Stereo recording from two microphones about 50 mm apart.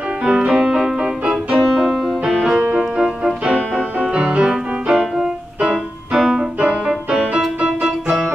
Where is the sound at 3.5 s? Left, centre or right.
Right.